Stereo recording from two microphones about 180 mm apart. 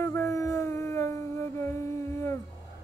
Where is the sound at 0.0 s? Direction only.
15° left (ahead or behind).